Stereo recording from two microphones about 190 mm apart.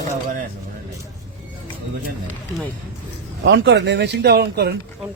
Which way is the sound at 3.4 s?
70° right (ahead or behind).